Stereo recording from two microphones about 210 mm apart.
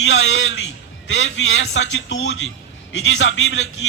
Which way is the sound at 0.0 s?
60° left (ahead or behind).